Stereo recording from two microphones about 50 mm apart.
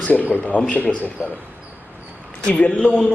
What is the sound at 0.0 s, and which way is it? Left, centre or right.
Speech, left.